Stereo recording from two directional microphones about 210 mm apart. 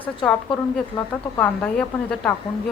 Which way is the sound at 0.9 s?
20° left (ahead or behind).